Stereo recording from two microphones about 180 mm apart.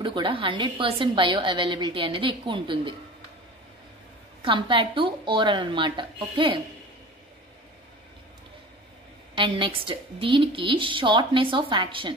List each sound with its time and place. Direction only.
0.0 s a woman's voice: 30° right (ahead or behind)
4.4 s a woman's voice: 30° right (ahead or behind)
9.3 s a woman's voice: 30° right (ahead or behind)